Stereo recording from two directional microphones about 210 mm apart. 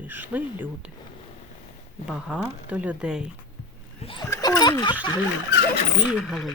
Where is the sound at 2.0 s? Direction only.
5° right (ahead or behind).